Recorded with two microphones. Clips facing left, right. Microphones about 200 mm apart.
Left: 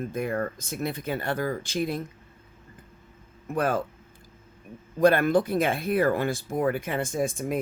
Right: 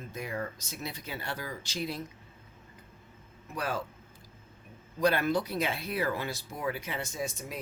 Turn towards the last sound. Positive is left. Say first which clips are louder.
# left 10 dB
turn(degrees=50)  # may be behind; listen again after turning